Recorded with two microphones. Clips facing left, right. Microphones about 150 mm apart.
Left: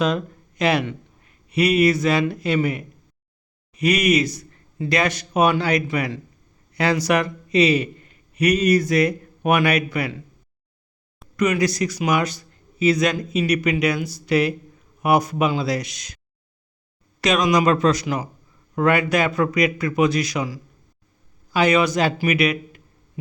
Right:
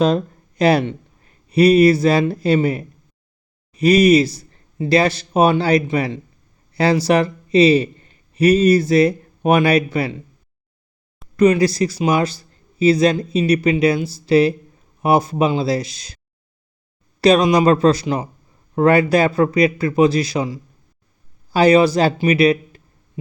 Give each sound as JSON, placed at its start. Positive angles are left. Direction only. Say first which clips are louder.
{"t": 0.0, "sound": "a man's voice", "louder": "right 5 dB", "side_deg": -35}
{"t": 11.3, "sound": "a man's voice", "louder": "right 6 dB", "side_deg": -30}